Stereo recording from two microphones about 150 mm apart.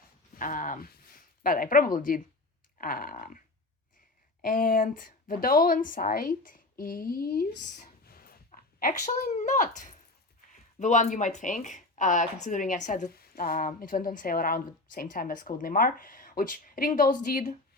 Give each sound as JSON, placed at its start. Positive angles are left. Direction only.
{"t": 0.3, "sound": "speech", "side_deg": 65}
{"t": 8.0, "sound": "a sound", "side_deg": 80}
{"t": 10.8, "sound": "speech", "side_deg": 55}
{"t": 13.1, "sound": "speech", "side_deg": 80}